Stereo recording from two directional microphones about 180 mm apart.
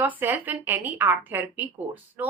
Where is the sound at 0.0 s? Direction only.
10° right (ahead or behind).